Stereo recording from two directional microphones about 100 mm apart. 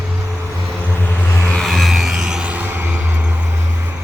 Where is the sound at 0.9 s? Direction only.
20° left (ahead or behind).